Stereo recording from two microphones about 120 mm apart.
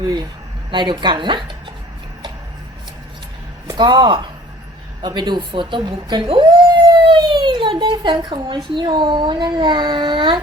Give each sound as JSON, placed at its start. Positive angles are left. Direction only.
{"t": 0.7, "sound": "a woman's voice", "side_deg": -40}
{"t": 3.7, "sound": "a woman's voice", "side_deg": -35}